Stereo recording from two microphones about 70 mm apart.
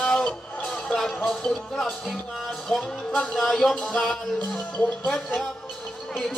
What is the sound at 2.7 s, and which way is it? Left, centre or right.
Music, centre.